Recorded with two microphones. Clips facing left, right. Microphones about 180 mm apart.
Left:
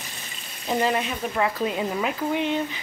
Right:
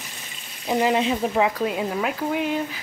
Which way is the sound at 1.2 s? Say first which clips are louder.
Right 5 dB; 30° right (ahead or behind).